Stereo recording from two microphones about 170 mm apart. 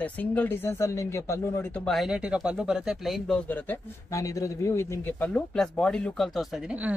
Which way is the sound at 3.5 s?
15° left (ahead or behind).